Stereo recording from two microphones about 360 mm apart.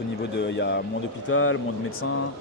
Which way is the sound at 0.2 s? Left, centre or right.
Left.